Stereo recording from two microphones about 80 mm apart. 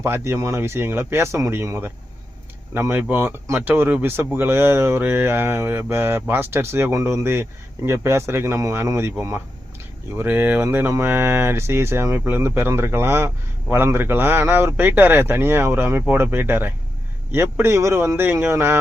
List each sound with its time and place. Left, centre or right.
0.0 s speech: right
2.7 s speech: right
10.2 s speech: right